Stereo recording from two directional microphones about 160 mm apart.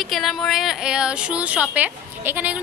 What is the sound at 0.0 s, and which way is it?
A woman's voice, centre (ahead or behind).